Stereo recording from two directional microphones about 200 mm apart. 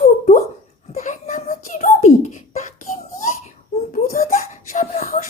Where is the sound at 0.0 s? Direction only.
35° left (ahead or behind).